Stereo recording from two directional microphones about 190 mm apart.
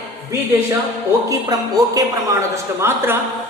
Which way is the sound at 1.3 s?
20° right (ahead or behind).